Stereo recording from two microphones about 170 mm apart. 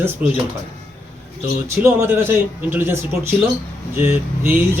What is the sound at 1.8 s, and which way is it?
Speech, 15° right (ahead or behind).